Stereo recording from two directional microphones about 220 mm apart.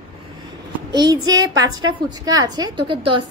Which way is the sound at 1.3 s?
60° right (ahead or behind).